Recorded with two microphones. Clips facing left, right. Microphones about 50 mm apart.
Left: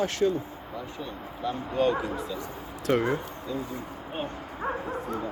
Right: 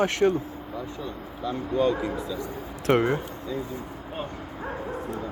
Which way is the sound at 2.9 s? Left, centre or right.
Right.